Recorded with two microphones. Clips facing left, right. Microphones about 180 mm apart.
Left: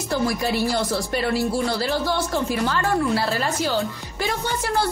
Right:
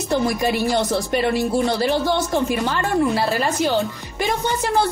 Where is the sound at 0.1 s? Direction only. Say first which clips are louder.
Right 3 dB; 20° right (ahead or behind).